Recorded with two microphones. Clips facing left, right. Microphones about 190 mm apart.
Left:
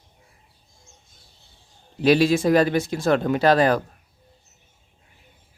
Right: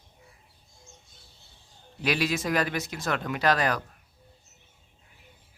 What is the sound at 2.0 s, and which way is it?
Speech, 30° left (ahead or behind).